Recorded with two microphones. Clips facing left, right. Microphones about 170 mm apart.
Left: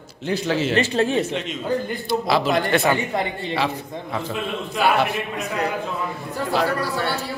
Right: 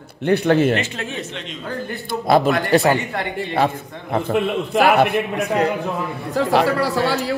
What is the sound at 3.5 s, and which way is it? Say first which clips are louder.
A man's voice: right 6 dB; 50° right (ahead or behind).